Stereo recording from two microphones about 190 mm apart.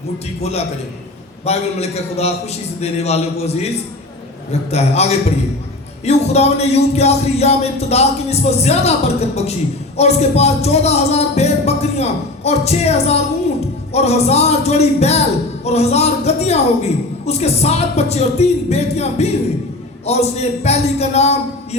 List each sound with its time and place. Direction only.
1.5 s a man's voice: 35° left (ahead or behind)
4.7 s a man's voice: 35° left (ahead or behind)